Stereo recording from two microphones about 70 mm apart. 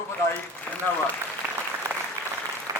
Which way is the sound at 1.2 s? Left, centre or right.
Right.